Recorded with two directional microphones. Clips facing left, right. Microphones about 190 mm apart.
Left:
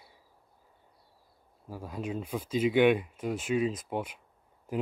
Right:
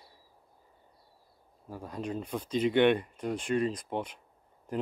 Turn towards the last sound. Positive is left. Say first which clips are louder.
# left 1 dB
turn(degrees=5)  # may be behind; listen again after turning